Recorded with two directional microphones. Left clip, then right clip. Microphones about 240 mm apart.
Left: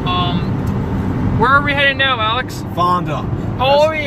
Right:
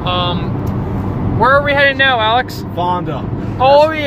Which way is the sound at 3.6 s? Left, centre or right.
Centre.